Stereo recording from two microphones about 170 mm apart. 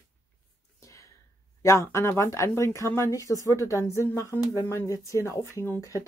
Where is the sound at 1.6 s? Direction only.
15° left (ahead or behind).